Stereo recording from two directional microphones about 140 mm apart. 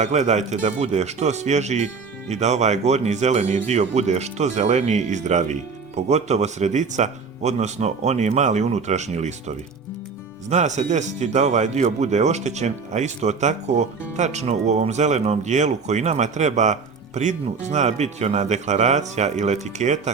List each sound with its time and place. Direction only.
0.0 s speech: 55° right (ahead or behind)